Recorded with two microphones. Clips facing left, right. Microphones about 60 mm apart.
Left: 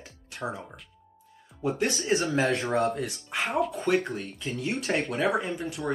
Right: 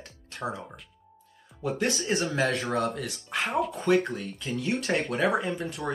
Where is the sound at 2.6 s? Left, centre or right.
Right.